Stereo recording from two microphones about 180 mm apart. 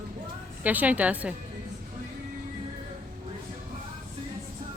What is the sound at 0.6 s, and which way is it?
Speech, 10° right (ahead or behind).